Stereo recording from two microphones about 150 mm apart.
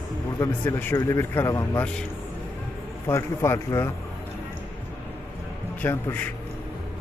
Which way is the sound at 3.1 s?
15° left (ahead or behind).